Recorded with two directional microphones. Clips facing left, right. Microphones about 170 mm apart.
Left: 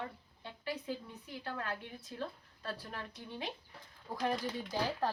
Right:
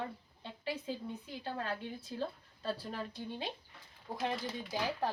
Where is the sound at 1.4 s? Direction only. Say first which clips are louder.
Right 1 dB; 30° right (ahead or behind).